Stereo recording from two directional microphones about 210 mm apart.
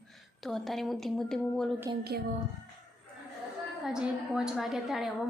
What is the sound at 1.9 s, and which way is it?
Speech, 20° right (ahead or behind).